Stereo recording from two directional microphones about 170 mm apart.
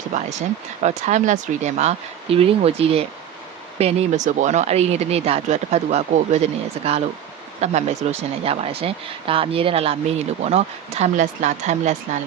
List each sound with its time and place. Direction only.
0.1 s speech: 45° right (ahead or behind)